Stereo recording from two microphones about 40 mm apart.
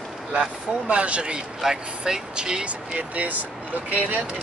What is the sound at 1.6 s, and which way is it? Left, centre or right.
Speech, centre.